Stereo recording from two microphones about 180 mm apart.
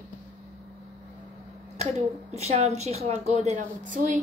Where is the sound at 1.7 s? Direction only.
35° right (ahead or behind).